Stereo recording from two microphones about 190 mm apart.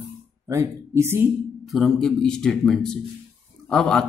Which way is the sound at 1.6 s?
Centre (ahead or behind).